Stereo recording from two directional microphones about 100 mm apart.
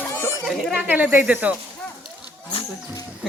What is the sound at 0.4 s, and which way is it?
Speech, 5° right (ahead or behind).